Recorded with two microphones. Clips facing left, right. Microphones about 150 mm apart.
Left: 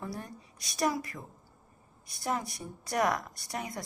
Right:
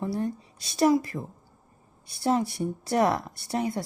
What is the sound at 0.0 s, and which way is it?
Speech, 25° right (ahead or behind).